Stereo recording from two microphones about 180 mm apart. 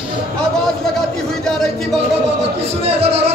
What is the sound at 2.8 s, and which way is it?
Speech, 35° right (ahead or behind).